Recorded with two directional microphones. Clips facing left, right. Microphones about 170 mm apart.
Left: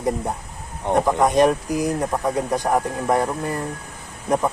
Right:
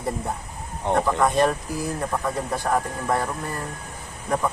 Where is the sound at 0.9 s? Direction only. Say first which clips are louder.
Left 3 dB; 15° left (ahead or behind).